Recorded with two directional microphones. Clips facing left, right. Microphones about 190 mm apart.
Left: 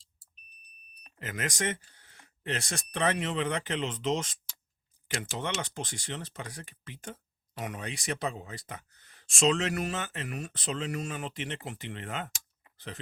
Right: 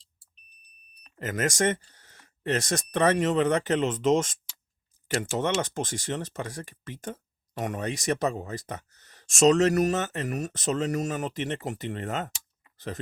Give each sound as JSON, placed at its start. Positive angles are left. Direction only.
{"t": 1.2, "sound": "speech", "side_deg": -45}